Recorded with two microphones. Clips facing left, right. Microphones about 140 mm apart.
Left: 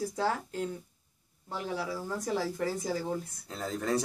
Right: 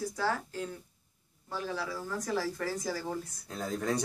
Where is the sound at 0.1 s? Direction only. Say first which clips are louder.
Left 1 dB; 25° left (ahead or behind).